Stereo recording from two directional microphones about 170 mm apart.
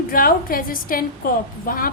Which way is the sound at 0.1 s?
55° left (ahead or behind).